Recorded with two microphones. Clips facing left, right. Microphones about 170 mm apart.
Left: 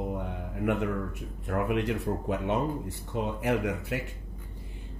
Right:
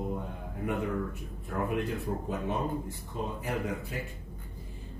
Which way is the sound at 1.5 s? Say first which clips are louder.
Left 3 dB; 75° left (ahead or behind).